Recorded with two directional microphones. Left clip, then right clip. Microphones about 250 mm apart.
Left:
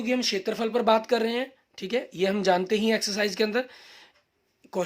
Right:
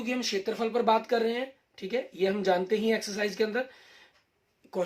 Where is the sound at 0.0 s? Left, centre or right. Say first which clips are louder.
Left 4 dB; left.